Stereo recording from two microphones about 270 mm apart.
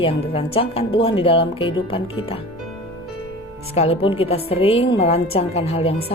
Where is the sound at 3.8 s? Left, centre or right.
Left.